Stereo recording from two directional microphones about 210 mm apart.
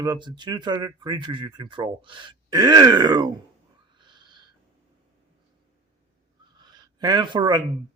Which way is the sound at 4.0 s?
20° right (ahead or behind).